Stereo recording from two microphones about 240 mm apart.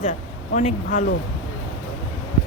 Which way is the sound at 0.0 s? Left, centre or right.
Left.